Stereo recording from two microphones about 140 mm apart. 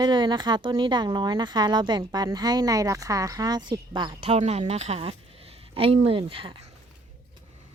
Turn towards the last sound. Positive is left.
turn(degrees=-40)  # may be behind; listen again after turning